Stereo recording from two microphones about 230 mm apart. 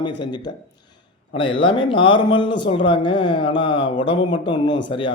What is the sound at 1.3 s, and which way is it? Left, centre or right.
Speech, left.